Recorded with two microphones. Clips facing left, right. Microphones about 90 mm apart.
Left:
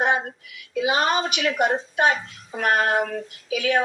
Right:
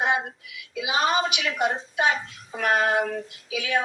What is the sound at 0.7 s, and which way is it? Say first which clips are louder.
Speech: left 2 dB; 50° left (ahead or behind).